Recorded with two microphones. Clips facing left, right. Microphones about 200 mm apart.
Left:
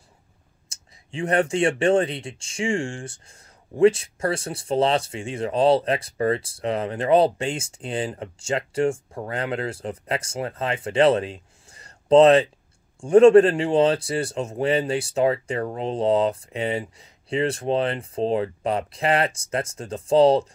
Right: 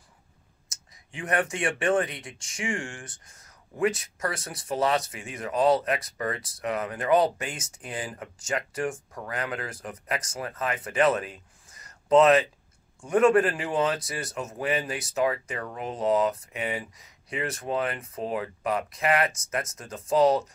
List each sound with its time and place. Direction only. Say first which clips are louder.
0.7 s speech: left 9 dB; 30° left (ahead or behind)